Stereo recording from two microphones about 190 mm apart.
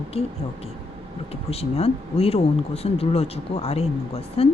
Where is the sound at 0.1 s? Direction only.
30° left (ahead or behind).